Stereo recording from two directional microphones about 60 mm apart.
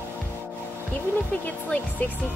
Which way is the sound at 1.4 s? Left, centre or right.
Left.